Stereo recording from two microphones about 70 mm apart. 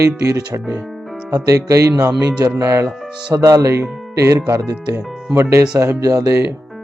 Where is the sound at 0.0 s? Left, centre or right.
Right.